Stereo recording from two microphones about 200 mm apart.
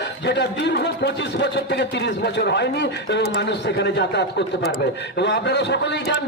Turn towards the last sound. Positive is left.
turn(degrees=60)  # may be behind; listen again after turning